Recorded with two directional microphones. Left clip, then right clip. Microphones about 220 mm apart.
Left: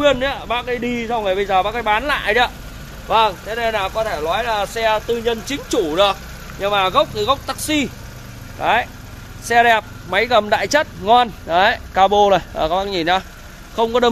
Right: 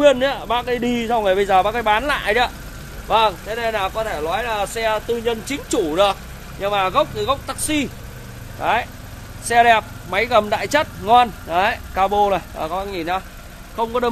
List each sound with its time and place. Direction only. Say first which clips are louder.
0.0 s speech: right 2 dB; 15° right (ahead or behind); by 6.1 s 5° left (ahead or behind)
6.6 s speech: left 2 dB; 15° left (ahead or behind); by 13.2 s 35° left (ahead or behind)